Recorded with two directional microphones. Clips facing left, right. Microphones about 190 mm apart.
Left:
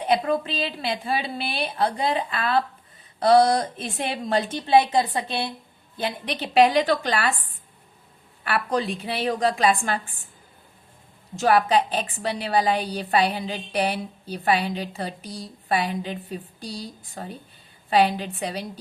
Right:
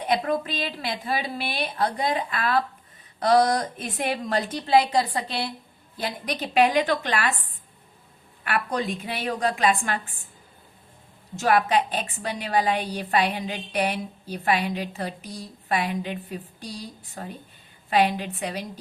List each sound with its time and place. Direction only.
0.0 s a woman's voice: 30° left (ahead or behind)
8.4 s a woman's voice: 30° left (ahead or behind)
11.3 s a woman's voice: 30° left (ahead or behind)